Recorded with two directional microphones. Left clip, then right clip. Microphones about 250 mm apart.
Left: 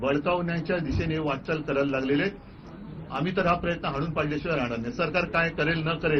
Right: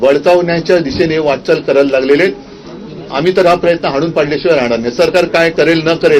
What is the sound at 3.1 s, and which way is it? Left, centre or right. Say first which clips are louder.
A man's voice: right 16 dB; centre.